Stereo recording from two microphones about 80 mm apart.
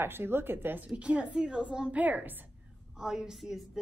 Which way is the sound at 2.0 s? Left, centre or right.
Right.